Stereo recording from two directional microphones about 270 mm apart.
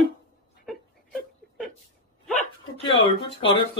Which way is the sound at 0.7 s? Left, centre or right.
Centre.